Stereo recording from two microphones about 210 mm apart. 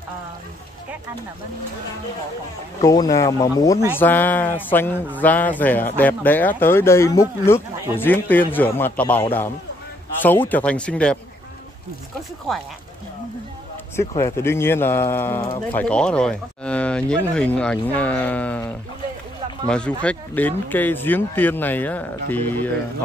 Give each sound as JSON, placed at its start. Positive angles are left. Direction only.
{"t": 2.8, "sound": "speech", "side_deg": 15}
{"t": 13.9, "sound": "speech", "side_deg": 15}
{"t": 19.7, "sound": "speech", "side_deg": 5}